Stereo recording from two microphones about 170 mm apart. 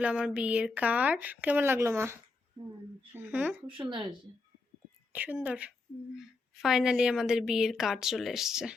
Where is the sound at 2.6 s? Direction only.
30° right (ahead or behind).